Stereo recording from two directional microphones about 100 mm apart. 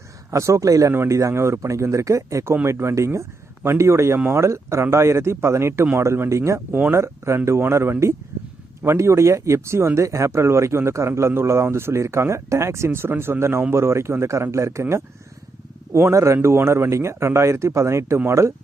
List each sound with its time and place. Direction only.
0.3 s speech: 30° right (ahead or behind)